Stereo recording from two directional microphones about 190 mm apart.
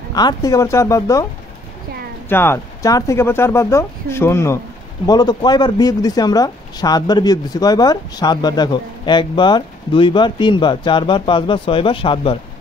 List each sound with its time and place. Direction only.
0.1 s speech: 20° left (ahead or behind)
2.2 s speech: 10° left (ahead or behind); by 12.4 s 30° left (ahead or behind)